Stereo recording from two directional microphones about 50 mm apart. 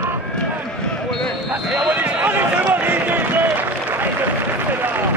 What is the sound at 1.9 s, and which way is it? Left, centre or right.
Basketball bounce, right.